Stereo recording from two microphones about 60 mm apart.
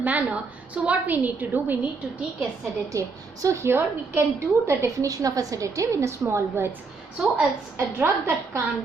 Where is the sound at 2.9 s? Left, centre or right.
Right.